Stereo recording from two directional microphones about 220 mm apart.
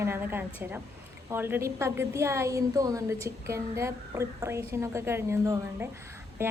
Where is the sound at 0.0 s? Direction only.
10° right (ahead or behind).